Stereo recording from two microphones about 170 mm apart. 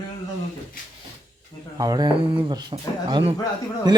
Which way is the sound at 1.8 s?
20° right (ahead or behind).